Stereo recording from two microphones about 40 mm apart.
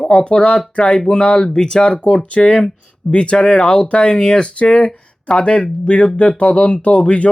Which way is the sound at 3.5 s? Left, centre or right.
Centre.